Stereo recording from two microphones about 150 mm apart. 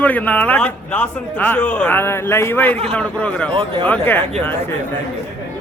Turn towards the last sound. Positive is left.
turn(degrees=10)  # may be behind; listen again after turning